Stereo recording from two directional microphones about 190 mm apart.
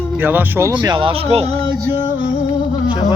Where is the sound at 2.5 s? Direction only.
25° left (ahead or behind).